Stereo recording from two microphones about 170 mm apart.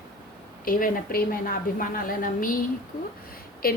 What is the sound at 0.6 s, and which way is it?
A woman's voice, 55° left (ahead or behind).